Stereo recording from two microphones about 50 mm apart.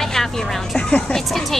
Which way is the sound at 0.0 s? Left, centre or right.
Centre.